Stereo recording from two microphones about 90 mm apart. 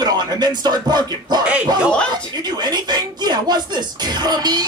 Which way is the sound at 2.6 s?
50° right (ahead or behind).